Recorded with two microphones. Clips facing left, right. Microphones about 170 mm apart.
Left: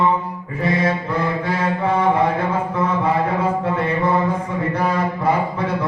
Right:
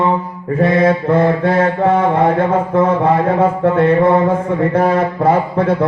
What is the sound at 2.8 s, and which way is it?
Music, 55° right (ahead or behind).